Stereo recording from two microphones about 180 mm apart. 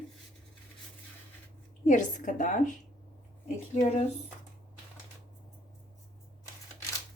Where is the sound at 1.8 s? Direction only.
45° left (ahead or behind).